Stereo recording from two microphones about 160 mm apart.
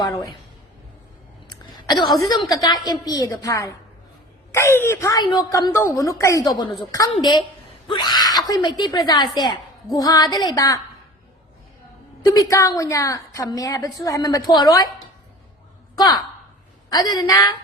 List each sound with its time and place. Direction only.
0.0 s a woman's voice: 30° left (ahead or behind)
1.5 s throat clearing: 25° left (ahead or behind)
2.4 s a woman's voice: 20° left (ahead or behind)
12.2 s a woman's voice: 20° left (ahead or behind)
16.0 s a woman's voice: 25° left (ahead or behind)